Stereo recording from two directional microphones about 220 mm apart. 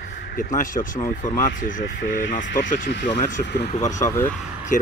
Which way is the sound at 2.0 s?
55° left (ahead or behind).